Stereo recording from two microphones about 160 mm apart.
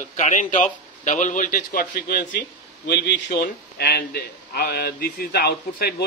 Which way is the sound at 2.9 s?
90° left.